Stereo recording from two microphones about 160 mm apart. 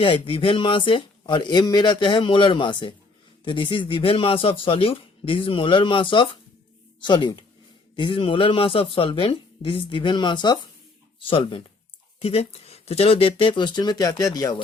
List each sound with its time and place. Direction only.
0.0 s speech: 30° left (ahead or behind)